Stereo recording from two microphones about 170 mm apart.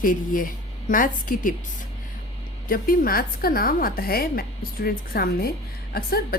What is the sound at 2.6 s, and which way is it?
A woman's voice, 60° left (ahead or behind).